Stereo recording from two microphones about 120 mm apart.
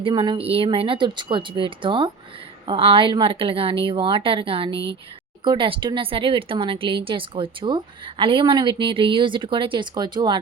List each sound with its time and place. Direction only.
0.0 s speech: 45° right (ahead or behind)